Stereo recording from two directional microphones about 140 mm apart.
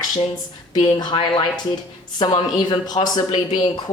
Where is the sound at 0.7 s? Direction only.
30° left (ahead or behind).